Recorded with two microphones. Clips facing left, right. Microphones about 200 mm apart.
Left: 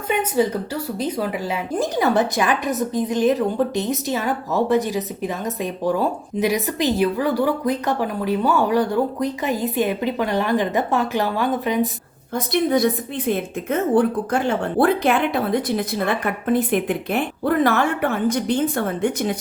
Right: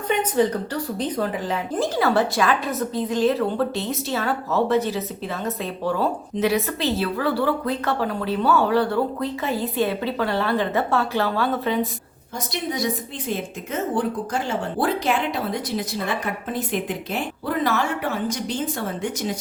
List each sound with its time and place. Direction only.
0.1 s speech: 10° left (ahead or behind)
12.5 s a woman's voice: 55° left (ahead or behind)